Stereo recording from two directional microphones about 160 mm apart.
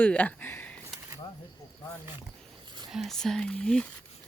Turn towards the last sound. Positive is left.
turn(degrees=5)  # may be behind; listen again after turning